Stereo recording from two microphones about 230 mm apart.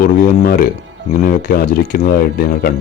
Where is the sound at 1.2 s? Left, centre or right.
Left.